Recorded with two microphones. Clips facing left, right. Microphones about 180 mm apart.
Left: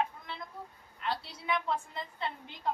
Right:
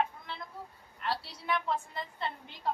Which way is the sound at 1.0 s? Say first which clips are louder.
Even; centre (ahead or behind).